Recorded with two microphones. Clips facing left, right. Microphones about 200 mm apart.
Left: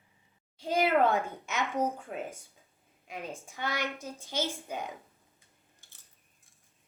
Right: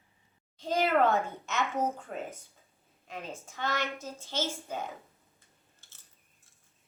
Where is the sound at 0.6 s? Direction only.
10° left (ahead or behind).